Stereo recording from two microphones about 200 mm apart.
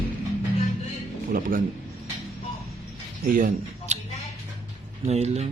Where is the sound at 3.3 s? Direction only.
40° right (ahead or behind).